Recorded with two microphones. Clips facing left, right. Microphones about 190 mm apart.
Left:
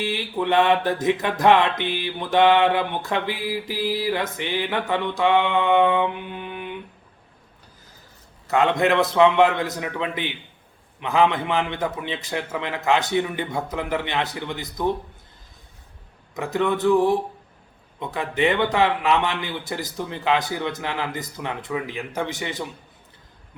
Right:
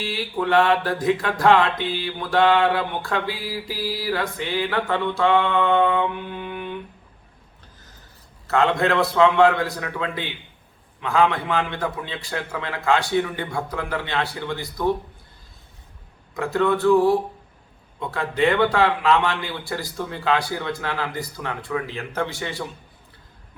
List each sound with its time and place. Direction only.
0.0 s music: 20° left (ahead or behind)
8.4 s music: 15° left (ahead or behind)
16.3 s speech: 20° left (ahead or behind)
18.0 s music: 20° left (ahead or behind)